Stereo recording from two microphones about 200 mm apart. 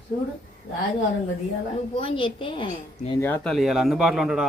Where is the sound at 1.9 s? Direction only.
25° left (ahead or behind).